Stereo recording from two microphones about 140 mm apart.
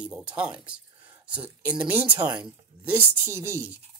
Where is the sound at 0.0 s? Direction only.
10° right (ahead or behind).